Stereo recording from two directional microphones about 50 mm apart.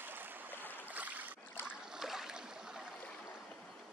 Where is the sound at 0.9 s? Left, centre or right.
Right.